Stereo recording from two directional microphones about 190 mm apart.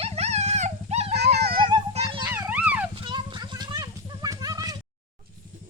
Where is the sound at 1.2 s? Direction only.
60° right (ahead or behind).